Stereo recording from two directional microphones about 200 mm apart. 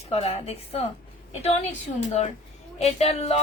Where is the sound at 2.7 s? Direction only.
30° left (ahead or behind).